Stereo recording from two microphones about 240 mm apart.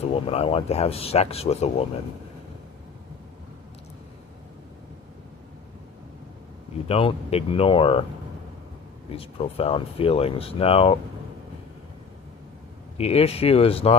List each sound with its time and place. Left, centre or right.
0.1 s speech: left
6.8 s speech: left
9.1 s speech: left
13.0 s speech: left